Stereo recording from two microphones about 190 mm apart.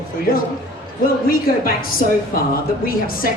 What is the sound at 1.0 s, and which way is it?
A woman's voice, 50° left (ahead or behind).